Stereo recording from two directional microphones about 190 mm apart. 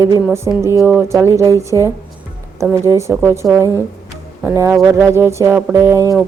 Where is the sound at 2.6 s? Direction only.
15° right (ahead or behind).